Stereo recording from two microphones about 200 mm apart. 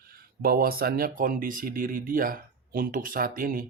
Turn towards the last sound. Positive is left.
turn(degrees=-45)  # may be behind; listen again after turning